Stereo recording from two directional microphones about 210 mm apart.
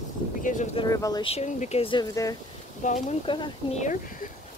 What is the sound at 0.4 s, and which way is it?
Speech, 40° left (ahead or behind).